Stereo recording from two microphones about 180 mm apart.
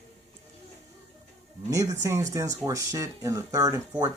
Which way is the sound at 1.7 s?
20° right (ahead or behind).